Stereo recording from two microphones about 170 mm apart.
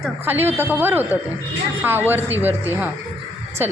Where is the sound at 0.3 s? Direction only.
10° right (ahead or behind).